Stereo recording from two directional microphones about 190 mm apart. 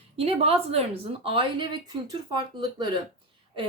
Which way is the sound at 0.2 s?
30° right (ahead or behind).